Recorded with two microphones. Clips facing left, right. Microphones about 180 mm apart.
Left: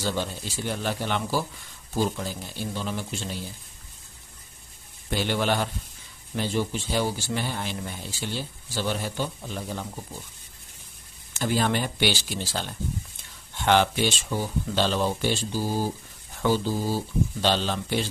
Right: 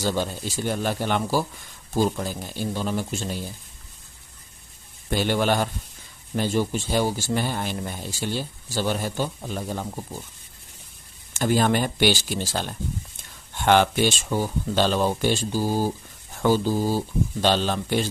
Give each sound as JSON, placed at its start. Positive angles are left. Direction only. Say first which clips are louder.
{"t": 0.0, "sound": "speech", "louder": "right 3 dB", "side_deg": -45}
{"t": 5.1, "sound": "speech", "louder": "right 3 dB", "side_deg": -45}
{"t": 11.3, "sound": "speech", "louder": "right 4 dB", "side_deg": -50}